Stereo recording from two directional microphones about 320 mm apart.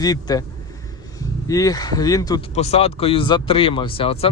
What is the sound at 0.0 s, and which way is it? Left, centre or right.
Speech, centre.